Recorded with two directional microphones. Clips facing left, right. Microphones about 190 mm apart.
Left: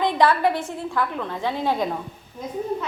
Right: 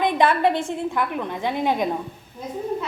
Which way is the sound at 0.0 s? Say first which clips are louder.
Even; 20° right (ahead or behind).